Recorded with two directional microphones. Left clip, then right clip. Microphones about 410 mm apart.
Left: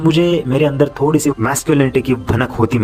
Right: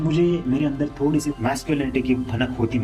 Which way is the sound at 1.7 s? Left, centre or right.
Centre.